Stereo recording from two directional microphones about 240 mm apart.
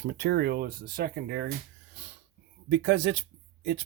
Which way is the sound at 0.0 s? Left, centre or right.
Right.